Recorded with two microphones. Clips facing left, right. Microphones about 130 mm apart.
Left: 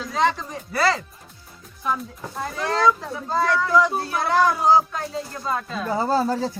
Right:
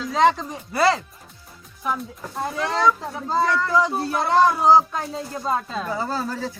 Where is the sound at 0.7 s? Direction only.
15° right (ahead or behind).